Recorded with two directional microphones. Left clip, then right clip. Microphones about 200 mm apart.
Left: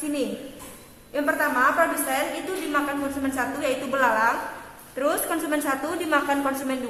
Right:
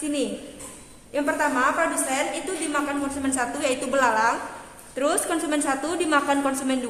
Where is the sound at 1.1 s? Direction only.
30° right (ahead or behind).